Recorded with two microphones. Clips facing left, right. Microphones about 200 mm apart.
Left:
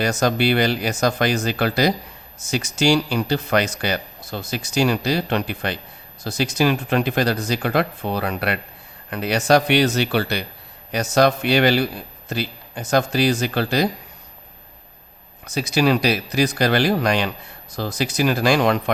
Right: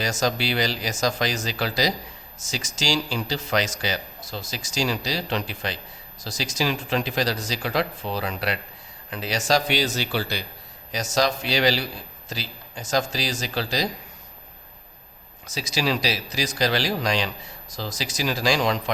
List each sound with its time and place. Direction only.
0.0 s speech: 60° left (ahead or behind)
15.4 s speech: 60° left (ahead or behind)